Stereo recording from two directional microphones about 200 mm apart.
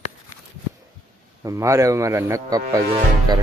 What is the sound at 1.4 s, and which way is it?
Speech, 15° right (ahead or behind).